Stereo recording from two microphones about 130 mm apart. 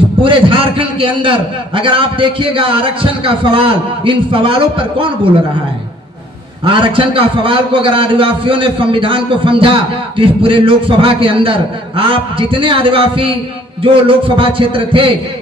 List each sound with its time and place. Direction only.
0.2 s a man's voice: 40° right (ahead or behind)
6.6 s a man's voice: 40° right (ahead or behind)